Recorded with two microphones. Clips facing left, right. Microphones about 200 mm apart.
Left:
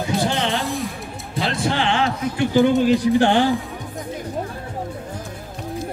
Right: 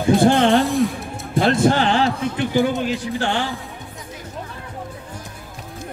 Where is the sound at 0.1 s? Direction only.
50° right (ahead or behind).